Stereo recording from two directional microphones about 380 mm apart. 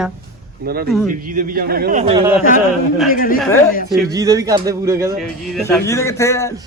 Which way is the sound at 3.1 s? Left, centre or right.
Left.